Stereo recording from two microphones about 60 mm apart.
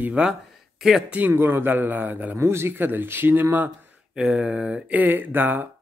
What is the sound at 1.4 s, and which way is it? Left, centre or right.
Speech, right.